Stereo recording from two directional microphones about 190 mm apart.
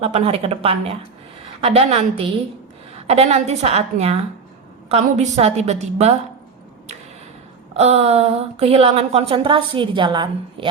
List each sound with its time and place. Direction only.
0.0 s a woman's voice: 35° right (ahead or behind)
7.7 s a woman's voice: 35° right (ahead or behind)